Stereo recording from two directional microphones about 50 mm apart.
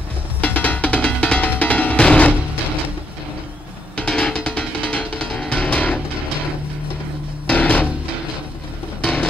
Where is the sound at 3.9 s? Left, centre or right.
Centre.